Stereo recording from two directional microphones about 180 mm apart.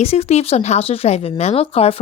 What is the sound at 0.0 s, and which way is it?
Speech, 35° left (ahead or behind).